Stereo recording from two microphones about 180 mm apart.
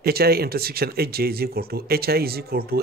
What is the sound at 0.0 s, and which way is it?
Speech, 60° right (ahead or behind).